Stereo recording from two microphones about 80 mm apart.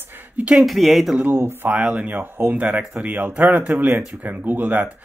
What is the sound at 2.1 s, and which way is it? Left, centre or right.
Speech, right.